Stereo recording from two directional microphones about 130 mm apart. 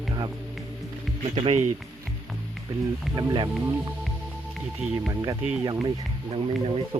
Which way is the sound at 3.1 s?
35° right (ahead or behind).